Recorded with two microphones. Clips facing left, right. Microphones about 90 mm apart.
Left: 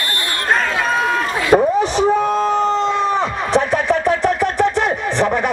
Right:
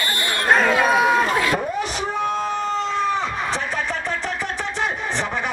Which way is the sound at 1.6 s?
35° left (ahead or behind).